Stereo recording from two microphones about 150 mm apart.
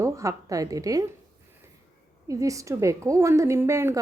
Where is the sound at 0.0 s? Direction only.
20° right (ahead or behind).